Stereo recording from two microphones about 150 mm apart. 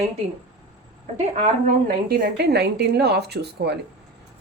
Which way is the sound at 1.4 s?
65° right (ahead or behind).